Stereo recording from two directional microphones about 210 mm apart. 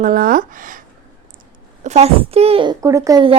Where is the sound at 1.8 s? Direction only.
30° right (ahead or behind).